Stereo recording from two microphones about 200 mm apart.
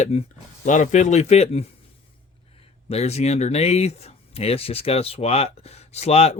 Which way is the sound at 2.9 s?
35° left (ahead or behind).